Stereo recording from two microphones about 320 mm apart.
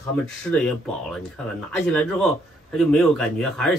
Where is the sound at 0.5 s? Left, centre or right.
Centre.